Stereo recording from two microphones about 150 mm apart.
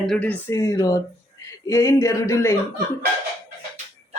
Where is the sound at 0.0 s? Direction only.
5° left (ahead or behind).